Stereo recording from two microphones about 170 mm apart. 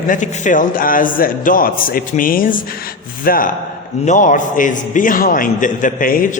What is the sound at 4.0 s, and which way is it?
A man's voice, 45° left (ahead or behind).